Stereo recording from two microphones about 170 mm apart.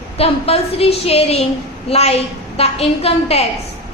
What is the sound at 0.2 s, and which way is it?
A woman's voice, 35° left (ahead or behind).